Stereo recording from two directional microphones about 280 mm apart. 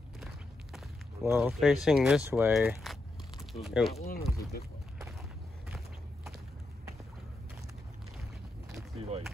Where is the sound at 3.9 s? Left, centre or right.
Left.